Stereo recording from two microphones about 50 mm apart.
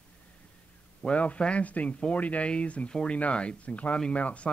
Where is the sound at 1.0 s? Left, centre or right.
Left.